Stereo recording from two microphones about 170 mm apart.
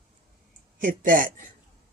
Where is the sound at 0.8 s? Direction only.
50° right (ahead or behind).